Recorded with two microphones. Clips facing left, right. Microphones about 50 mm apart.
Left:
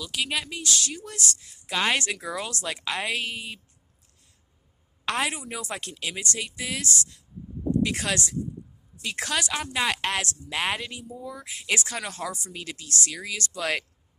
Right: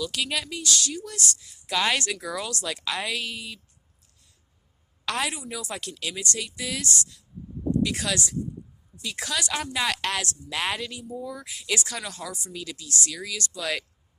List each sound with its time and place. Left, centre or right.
0.0 s speech: centre; by 1.2 s left
1.6 s a woman's voice: left
5.0 s a woman's voice: left
9.7 s speech: centre
11.1 s speech: centre
11.4 s a woman's voice: left